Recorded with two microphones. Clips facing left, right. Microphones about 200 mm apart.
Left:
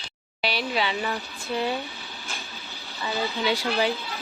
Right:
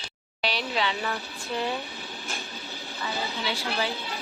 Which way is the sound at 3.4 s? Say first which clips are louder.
Left 6 dB; 15° left (ahead or behind).